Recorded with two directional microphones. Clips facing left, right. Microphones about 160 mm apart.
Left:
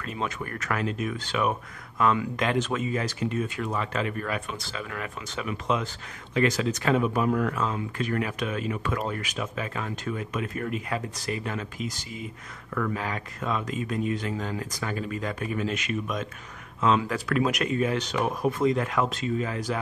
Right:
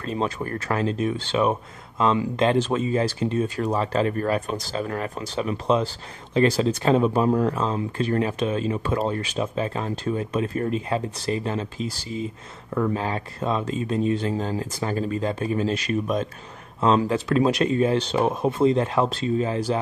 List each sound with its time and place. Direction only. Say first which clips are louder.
0.0 s speech: right 6 dB; 30° right (ahead or behind)